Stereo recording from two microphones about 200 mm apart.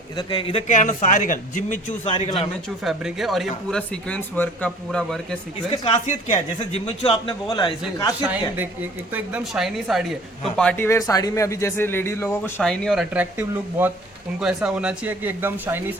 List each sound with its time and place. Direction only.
0.2 s a man's voice: 25° left (ahead or behind)
2.0 s a man's voice: 30° left (ahead or behind)
2.6 s speech: centre (ahead or behind)
5.7 s a man's voice: 25° left (ahead or behind)
6.1 s a man's voice: 40° left (ahead or behind)
6.6 s a man's voice: 25° left (ahead or behind)
9.1 s speech: 5° right (ahead or behind)
10.6 s speech: 10° left (ahead or behind); by 16.0 s 10° right (ahead or behind)